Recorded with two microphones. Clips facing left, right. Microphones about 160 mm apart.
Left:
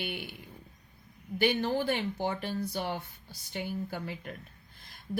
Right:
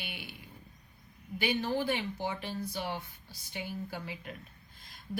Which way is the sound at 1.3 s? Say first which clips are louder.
Left 3 dB; 50° left (ahead or behind).